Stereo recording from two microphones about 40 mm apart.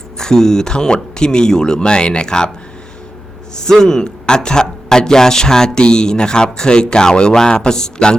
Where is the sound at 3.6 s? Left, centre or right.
Centre.